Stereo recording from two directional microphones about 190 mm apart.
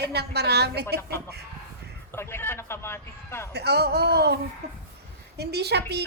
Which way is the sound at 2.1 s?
10° left (ahead or behind).